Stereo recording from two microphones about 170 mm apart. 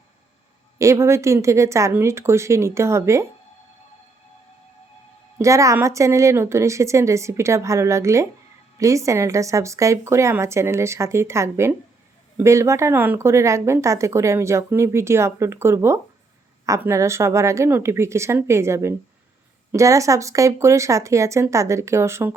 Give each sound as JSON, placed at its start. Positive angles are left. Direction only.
{"t": 0.8, "sound": "speech", "side_deg": -15}
{"t": 5.4, "sound": "speech", "side_deg": -20}